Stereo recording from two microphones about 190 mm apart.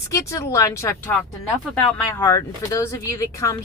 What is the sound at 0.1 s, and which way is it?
Speech, 15° left (ahead or behind).